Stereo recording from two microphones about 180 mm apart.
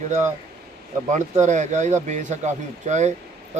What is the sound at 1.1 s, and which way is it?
A man's voice, 40° right (ahead or behind).